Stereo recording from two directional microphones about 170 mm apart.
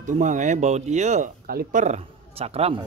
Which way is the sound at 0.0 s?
50° right (ahead or behind).